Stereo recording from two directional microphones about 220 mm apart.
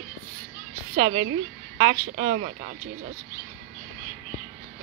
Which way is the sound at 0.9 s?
25° right (ahead or behind).